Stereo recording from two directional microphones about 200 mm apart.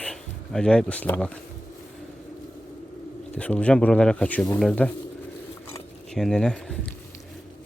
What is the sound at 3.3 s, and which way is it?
Speech, 5° left (ahead or behind).